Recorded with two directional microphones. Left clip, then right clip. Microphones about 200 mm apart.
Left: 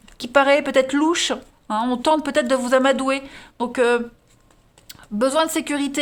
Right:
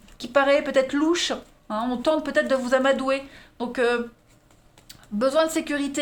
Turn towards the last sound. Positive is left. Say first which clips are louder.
# left 2 dB
turn(degrees=40)  # may be behind; listen again after turning